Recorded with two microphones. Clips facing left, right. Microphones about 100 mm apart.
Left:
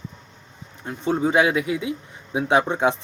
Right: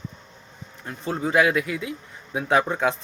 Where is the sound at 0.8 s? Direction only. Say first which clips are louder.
Left 5 dB; 25° left (ahead or behind).